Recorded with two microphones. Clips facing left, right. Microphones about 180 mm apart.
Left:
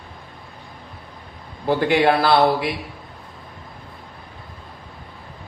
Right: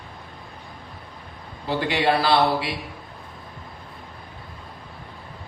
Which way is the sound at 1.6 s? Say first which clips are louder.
Left 5 dB; 50° left (ahead or behind).